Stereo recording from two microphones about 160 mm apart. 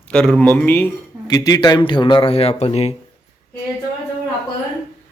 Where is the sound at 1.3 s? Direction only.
25° left (ahead or behind); by 2.9 s 40° left (ahead or behind).